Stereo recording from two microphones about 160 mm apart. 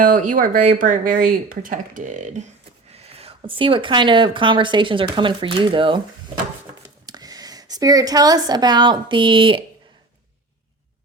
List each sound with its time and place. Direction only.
0.0 s speech: 55° right (ahead or behind)
2.9 s speech: 40° right (ahead or behind)
7.0 s a woman's voice: 25° right (ahead or behind)